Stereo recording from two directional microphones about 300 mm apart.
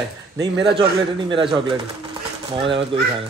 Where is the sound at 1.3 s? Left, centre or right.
Centre.